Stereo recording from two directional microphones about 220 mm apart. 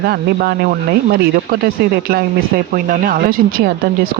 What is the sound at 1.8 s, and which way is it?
Speech, 45° right (ahead or behind).